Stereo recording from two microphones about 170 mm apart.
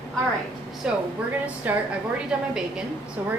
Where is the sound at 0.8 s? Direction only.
5° right (ahead or behind).